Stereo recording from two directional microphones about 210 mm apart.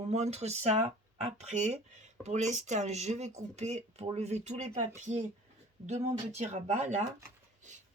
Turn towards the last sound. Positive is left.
turn(degrees=-35)  # may be behind; listen again after turning